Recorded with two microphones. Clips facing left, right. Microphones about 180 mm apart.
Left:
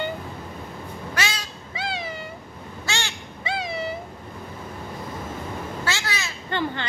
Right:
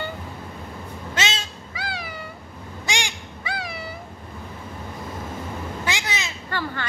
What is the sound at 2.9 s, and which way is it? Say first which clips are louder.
Goose: right 2 dB; 15° right (ahead or behind).